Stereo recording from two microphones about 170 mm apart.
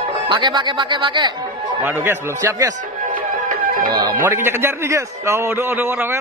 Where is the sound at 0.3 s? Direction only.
25° right (ahead or behind).